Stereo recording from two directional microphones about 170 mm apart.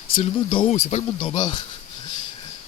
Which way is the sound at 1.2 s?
25° left (ahead or behind).